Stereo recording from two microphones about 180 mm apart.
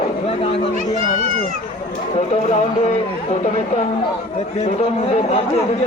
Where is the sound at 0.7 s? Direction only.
45° left (ahead or behind).